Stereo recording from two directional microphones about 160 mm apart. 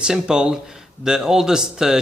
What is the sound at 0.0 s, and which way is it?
A man's voice, 5° right (ahead or behind).